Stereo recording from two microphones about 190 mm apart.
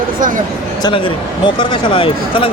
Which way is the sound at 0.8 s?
25° left (ahead or behind).